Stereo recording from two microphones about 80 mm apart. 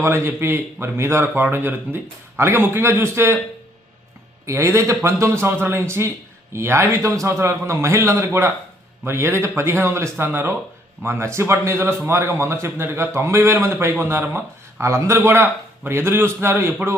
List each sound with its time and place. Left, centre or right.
0.0 s a man's voice: right
4.4 s a man's voice: right